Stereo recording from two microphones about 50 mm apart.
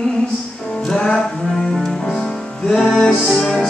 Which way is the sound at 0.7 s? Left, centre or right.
Centre.